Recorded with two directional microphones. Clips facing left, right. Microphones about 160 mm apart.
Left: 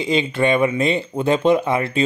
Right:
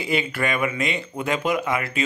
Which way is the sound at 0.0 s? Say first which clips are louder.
Left 6 dB; 25° left (ahead or behind).